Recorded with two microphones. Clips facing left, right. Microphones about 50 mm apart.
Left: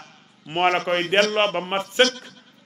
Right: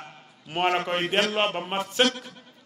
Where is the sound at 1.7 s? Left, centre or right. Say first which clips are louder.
Left 3 dB; left.